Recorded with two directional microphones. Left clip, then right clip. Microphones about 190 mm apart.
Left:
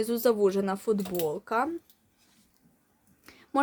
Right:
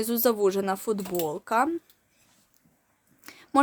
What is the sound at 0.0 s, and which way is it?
Speech, 20° right (ahead or behind).